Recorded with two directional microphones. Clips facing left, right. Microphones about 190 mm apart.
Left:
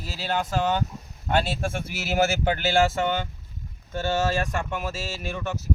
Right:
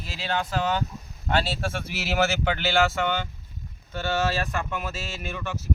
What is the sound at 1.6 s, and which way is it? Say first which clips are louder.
Speech: left 1 dB; 50° left (ahead or behind).